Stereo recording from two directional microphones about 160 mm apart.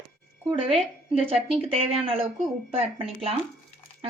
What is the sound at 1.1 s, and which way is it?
A woman's voice, 35° right (ahead or behind).